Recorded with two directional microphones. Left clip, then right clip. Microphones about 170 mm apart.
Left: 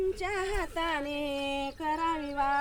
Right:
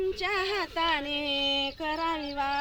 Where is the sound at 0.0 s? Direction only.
20° left (ahead or behind).